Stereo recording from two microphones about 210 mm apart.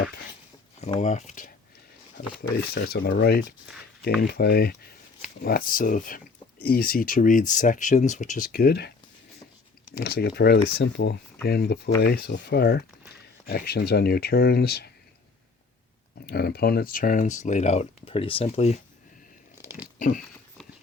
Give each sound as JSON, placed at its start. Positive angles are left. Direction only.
{"t": 0.8, "sound": "speech", "side_deg": 35}
{"t": 2.7, "sound": "speech", "side_deg": 50}
{"t": 10.0, "sound": "speech", "side_deg": 50}
{"t": 16.2, "sound": "speech", "side_deg": 50}
{"t": 19.6, "sound": "a sound", "side_deg": -5}
{"t": 20.0, "sound": "a sound", "side_deg": 40}